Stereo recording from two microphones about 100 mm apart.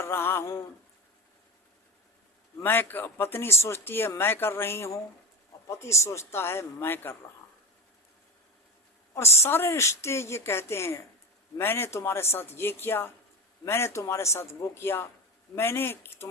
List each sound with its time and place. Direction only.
0.0 s a sound: 25° left (ahead or behind)
2.6 s speech: 20° left (ahead or behind)
9.1 s speech: 25° left (ahead or behind)